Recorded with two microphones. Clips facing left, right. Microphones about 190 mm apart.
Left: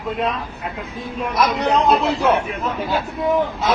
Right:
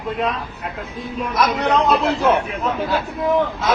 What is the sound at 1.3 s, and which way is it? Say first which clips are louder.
Speech: even; centre (ahead or behind).